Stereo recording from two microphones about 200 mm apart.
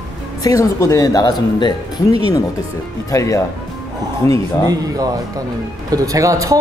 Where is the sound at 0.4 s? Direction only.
15° left (ahead or behind).